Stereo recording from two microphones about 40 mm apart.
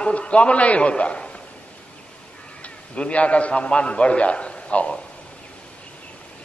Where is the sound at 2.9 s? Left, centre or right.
Left.